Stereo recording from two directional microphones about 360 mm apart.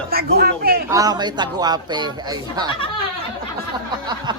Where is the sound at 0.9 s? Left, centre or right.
Centre.